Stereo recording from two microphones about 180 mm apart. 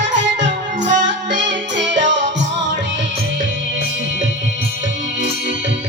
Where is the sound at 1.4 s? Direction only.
80° right.